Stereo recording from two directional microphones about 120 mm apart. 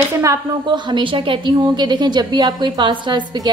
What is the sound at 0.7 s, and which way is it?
A woman's voice, 40° right (ahead or behind).